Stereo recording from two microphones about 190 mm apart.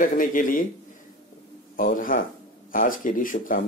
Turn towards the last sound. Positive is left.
turn(degrees=45)  # may be behind; listen again after turning